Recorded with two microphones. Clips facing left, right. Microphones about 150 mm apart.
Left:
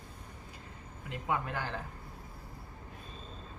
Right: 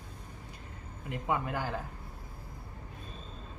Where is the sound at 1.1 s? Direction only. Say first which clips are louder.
Right 2 dB; 15° right (ahead or behind).